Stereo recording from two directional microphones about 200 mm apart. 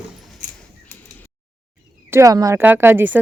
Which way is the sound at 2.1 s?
15° right (ahead or behind).